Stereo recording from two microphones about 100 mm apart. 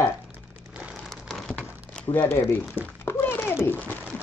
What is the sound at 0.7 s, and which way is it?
Crumpling, 10° right (ahead or behind).